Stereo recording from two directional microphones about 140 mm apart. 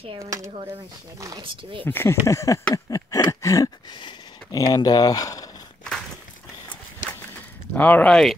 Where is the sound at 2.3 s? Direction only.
20° left (ahead or behind).